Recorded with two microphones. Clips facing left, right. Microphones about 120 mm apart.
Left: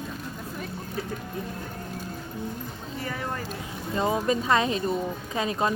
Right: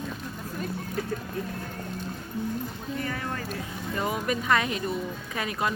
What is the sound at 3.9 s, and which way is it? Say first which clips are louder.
Speech: left 4 dB; 25° left (ahead or behind).